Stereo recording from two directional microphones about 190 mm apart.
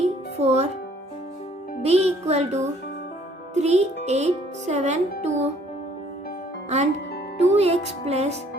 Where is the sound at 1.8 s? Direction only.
35° right (ahead or behind).